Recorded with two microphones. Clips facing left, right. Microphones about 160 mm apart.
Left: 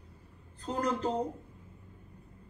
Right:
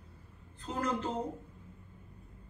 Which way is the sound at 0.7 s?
40° left (ahead or behind).